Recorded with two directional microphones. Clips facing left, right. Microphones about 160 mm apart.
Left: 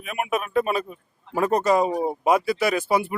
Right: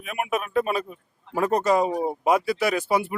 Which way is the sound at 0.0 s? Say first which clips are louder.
Left 1 dB; 15° left (ahead or behind).